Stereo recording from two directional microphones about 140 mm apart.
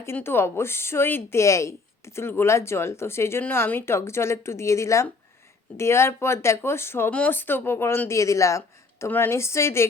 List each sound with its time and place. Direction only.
0.0 s a woman's voice: 15° left (ahead or behind)